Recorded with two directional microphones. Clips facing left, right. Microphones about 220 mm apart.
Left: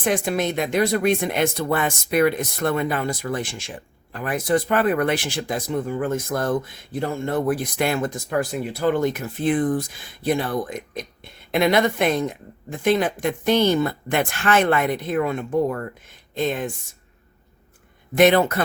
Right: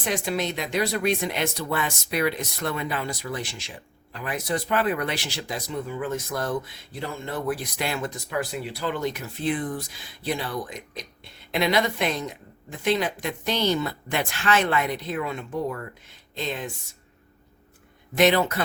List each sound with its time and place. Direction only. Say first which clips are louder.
0.0 s speech: left 5 dB; 50° left (ahead or behind)
18.2 s speech: left 4 dB; 50° left (ahead or behind)